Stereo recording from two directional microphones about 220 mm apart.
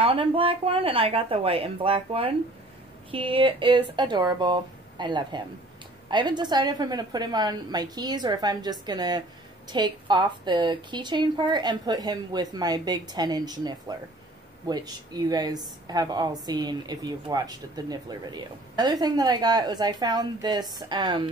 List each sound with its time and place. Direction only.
0.0 s a woman's voice: 25° right (ahead or behind)